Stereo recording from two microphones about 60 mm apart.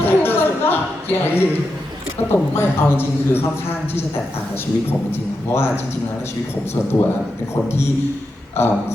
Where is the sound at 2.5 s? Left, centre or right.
Left.